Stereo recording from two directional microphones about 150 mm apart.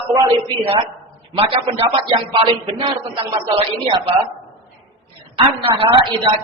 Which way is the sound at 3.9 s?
35° right (ahead or behind).